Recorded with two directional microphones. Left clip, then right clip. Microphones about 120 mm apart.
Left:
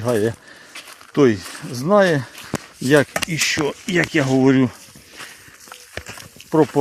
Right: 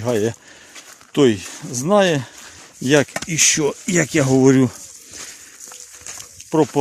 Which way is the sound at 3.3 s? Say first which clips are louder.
Right 4 dB; 75° right (ahead or behind).